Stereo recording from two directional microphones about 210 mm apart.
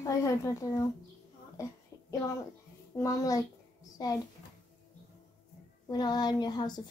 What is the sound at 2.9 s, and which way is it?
Speech, 15° left (ahead or behind).